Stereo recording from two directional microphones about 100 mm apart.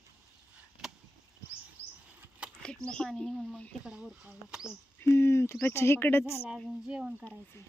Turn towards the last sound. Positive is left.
turn(degrees=-10)  # may be behind; listen again after turning